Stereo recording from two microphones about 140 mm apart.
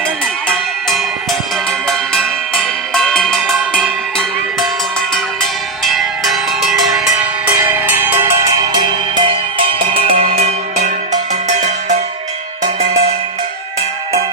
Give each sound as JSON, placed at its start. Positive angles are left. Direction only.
{"t": 0.9, "sound": "music", "side_deg": 0}
{"t": 4.9, "sound": "cowbell", "side_deg": 0}
{"t": 7.6, "sound": "music", "side_deg": -15}
{"t": 8.5, "sound": "music", "side_deg": -30}
{"t": 10.3, "sound": "music", "side_deg": -55}